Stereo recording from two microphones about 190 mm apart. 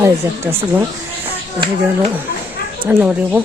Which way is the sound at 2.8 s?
10° right (ahead or behind).